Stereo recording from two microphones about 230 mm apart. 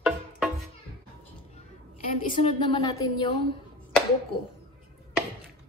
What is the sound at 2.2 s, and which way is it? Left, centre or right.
Speech, left.